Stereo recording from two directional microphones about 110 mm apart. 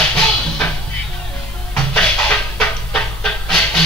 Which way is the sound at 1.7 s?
10° left (ahead or behind).